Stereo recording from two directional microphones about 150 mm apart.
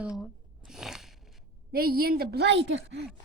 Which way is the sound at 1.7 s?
85° right.